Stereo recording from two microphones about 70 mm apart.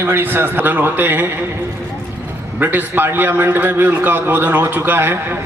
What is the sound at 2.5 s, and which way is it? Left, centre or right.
A man's voice, right.